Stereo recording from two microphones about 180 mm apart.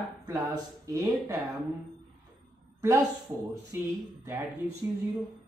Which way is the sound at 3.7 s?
15° right (ahead or behind).